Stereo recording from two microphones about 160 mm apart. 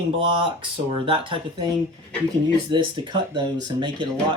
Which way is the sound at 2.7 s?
30° right (ahead or behind).